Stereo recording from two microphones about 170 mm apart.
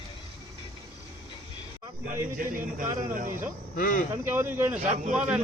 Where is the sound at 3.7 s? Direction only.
55° left (ahead or behind).